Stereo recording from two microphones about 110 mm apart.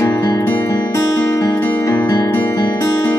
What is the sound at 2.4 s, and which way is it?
Music, 25° left (ahead or behind).